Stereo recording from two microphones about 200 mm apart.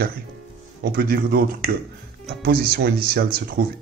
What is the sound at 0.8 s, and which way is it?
Speech, 50° right (ahead or behind).